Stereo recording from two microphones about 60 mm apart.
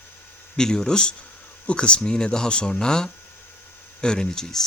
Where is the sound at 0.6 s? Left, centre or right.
Centre.